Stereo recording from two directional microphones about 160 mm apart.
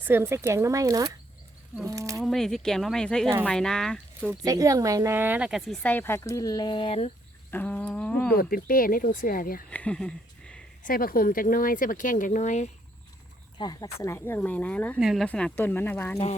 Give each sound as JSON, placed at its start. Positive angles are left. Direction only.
{"t": 0.0, "sound": "speech", "side_deg": -15}
{"t": 2.2, "sound": "speech", "side_deg": 0}
{"t": 4.3, "sound": "speech", "side_deg": -20}
{"t": 5.8, "sound": "speech", "side_deg": 10}
{"t": 7.5, "sound": "a sound", "side_deg": 10}
{"t": 8.3, "sound": "speech", "side_deg": 65}
{"t": 9.6, "sound": "a sound", "side_deg": 10}
{"t": 10.8, "sound": "speech", "side_deg": 65}
{"t": 13.6, "sound": "speech", "side_deg": 20}
{"t": 14.9, "sound": "speech", "side_deg": 0}